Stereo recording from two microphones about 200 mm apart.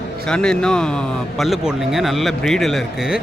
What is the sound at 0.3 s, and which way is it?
Speech, 5° left (ahead or behind).